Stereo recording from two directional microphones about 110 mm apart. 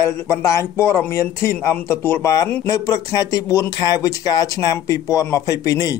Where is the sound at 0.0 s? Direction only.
25° left (ahead or behind).